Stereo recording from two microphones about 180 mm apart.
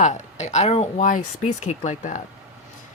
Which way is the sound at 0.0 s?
40° left (ahead or behind).